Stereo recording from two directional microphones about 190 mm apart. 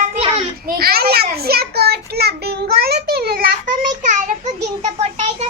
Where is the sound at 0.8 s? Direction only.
55° right (ahead or behind).